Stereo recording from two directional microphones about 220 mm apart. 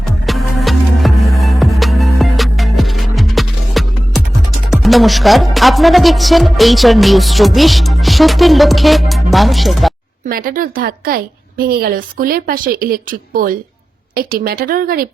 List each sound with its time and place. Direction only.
0.3 s music: centre (ahead or behind)
4.7 s speech: centre (ahead or behind)
10.2 s a woman's voice: 40° right (ahead or behind)